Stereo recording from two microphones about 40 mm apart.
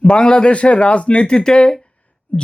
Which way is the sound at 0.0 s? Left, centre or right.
Centre.